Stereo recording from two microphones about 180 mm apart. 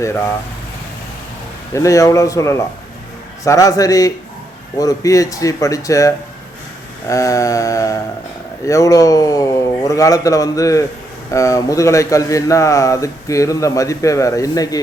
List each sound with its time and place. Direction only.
1.7 s speech: 20° left (ahead or behind)